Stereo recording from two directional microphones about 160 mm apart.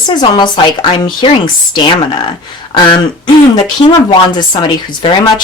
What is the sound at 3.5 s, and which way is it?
Speech, 30° left (ahead or behind).